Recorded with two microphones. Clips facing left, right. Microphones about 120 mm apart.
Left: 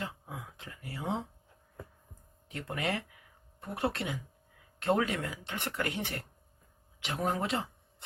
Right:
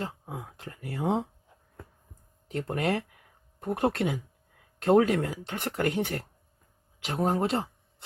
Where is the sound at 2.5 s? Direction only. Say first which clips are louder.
Right 6 dB; 40° right (ahead or behind).